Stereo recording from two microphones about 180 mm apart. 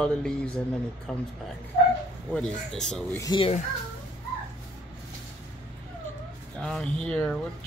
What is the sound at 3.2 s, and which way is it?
Speech, 25° left (ahead or behind).